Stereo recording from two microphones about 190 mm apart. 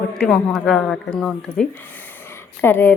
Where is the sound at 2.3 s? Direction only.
10° left (ahead or behind).